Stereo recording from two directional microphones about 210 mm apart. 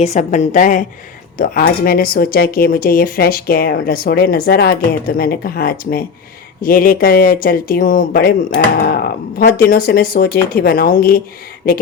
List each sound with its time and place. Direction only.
0.0 s a woman's voice: 35° left (ahead or behind)